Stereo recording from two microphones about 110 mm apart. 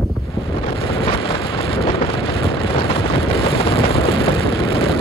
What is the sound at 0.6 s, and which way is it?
Vehicle, 55° left (ahead or behind).